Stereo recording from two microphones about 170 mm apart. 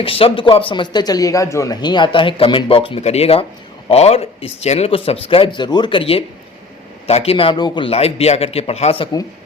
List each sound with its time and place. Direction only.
0.0 s speech: 35° left (ahead or behind)